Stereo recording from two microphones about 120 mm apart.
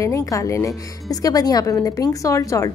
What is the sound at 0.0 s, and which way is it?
A woman's voice, 25° left (ahead or behind).